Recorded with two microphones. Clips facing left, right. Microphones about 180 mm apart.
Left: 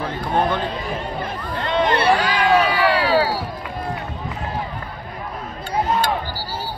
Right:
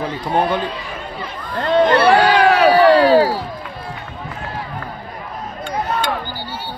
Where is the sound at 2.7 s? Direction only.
35° right (ahead or behind).